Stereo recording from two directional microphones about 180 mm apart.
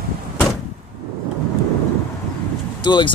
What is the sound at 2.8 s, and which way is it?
Speech, 25° left (ahead or behind).